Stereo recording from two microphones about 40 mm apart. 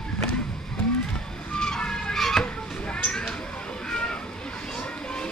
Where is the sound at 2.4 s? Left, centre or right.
Left.